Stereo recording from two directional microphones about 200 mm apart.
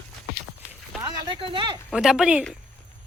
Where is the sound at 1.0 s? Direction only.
20° right (ahead or behind).